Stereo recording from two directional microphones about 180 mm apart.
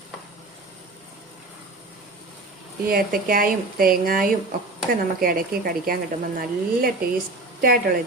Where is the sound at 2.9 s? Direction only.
55° right (ahead or behind).